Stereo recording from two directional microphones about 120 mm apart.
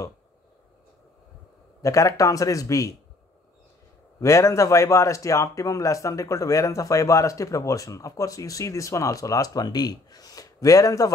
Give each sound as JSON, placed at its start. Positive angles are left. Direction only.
{"t": 1.8, "sound": "speech", "side_deg": 25}
{"t": 4.2, "sound": "speech", "side_deg": 25}